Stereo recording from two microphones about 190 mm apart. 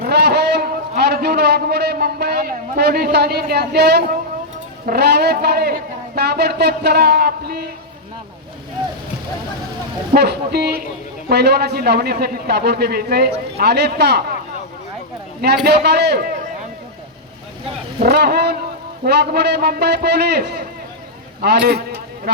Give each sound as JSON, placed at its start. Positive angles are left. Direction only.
{"t": 0.0, "sound": "a sound", "side_deg": -60}
{"t": 4.9, "sound": "a man's voice", "side_deg": -60}
{"t": 10.2, "sound": "a man's voice", "side_deg": -60}
{"t": 15.6, "sound": "a man's voice", "side_deg": -60}
{"t": 18.0, "sound": "a man's voice", "side_deg": -55}